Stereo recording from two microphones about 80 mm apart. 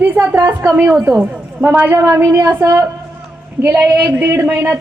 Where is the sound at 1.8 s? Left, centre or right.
Right.